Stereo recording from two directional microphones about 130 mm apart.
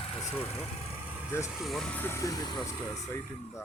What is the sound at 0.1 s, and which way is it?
Vehicle, 55° left (ahead or behind).